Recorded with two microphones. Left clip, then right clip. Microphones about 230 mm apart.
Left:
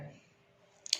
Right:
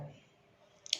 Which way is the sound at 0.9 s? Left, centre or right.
Left.